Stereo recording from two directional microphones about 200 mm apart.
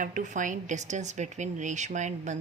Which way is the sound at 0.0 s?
40° right (ahead or behind).